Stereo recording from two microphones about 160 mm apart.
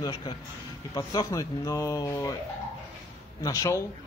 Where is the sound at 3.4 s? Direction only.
20° left (ahead or behind).